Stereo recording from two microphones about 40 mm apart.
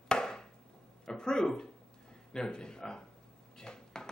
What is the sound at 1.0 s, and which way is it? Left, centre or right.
Speech, centre.